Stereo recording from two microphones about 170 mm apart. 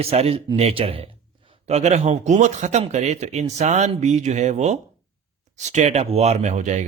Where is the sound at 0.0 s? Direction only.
35° right (ahead or behind).